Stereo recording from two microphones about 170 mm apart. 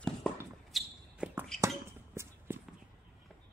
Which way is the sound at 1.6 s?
15° right (ahead or behind).